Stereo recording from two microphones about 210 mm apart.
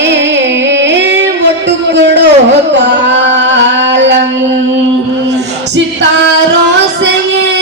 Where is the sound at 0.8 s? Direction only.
55° right (ahead or behind).